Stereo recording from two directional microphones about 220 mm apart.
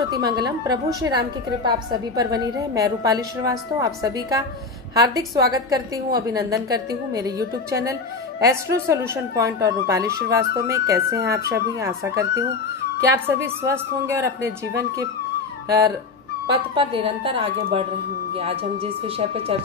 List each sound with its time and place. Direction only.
0.0 s a woman's voice: 15° right (ahead or behind)
16.5 s a woman's voice: 25° right (ahead or behind)